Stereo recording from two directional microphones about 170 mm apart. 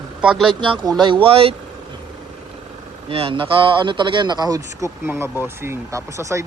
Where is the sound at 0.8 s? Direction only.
25° right (ahead or behind).